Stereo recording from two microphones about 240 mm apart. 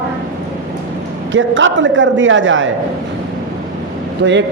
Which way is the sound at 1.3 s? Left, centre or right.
Right.